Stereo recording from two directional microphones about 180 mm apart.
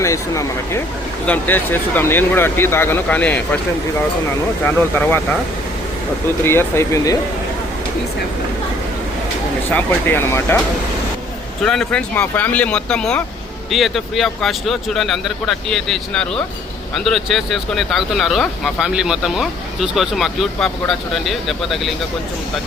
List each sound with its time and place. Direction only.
0.0 s speech: 15° left (ahead or behind)
4.6 s speech: 10° left (ahead or behind)
6.4 s speech: 15° left (ahead or behind)
9.6 s speech: 10° left (ahead or behind)
11.6 s speech: 5° left (ahead or behind)